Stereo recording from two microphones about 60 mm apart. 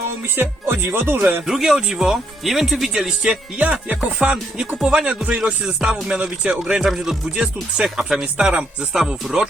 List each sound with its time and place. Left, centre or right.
0.3 s speech: right
1.5 s speech: centre
3.6 s speech: right; by 9.5 s centre